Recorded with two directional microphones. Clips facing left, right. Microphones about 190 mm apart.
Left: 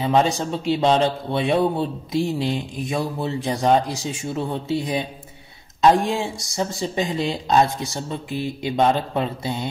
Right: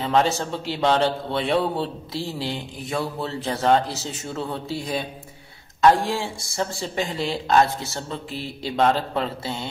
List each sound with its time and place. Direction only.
0.0 s a man's voice: 15° left (ahead or behind)